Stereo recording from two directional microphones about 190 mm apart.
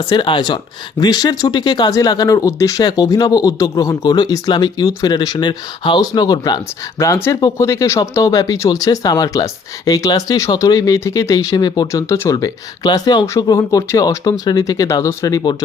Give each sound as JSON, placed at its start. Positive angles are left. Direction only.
{"t": 0.0, "sound": "speech", "side_deg": 25}